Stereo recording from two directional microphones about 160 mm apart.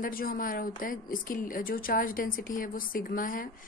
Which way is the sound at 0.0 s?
65° left (ahead or behind).